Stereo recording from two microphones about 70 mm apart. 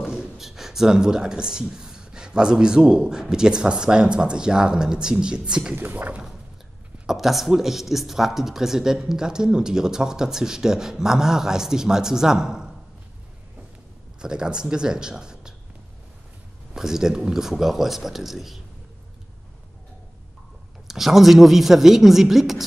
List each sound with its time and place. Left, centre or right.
0.0 s speech: centre
5.8 s speech: right
7.1 s speech: centre
14.2 s speech: centre
16.7 s speech: centre
20.8 s speech: centre